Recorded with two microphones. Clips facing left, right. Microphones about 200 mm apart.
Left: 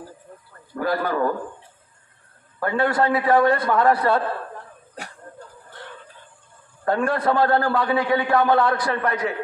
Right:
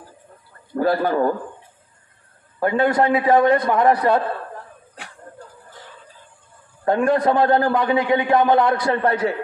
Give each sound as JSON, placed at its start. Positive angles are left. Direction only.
{"t": 0.7, "sound": "a man's voice", "side_deg": -30}
{"t": 2.6, "sound": "a man's voice", "side_deg": -20}
{"t": 6.8, "sound": "a man's voice", "side_deg": -20}